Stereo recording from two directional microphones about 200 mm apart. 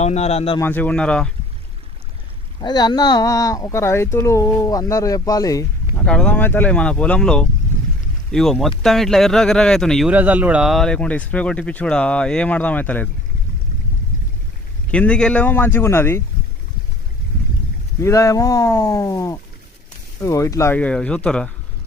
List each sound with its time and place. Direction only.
0.0 s a man's voice: 35° left (ahead or behind)
0.6 s speech: 10° left (ahead or behind)
2.6 s speech: 20° left (ahead or behind)
6.1 s speech: 5° left (ahead or behind)
10.1 s speech: 10° right (ahead or behind); by 13.1 s 10° left (ahead or behind)
14.8 s speech: 5° left (ahead or behind)
18.0 s speech: 15° left (ahead or behind)